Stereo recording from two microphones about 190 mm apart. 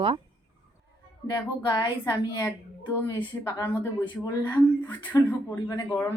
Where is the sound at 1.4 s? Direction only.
20° left (ahead or behind).